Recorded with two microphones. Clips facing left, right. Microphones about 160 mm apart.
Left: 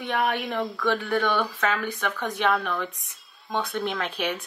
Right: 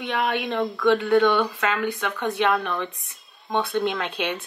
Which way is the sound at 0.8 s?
20° right (ahead or behind).